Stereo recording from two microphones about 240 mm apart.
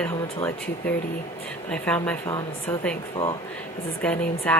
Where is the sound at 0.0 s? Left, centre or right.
Centre.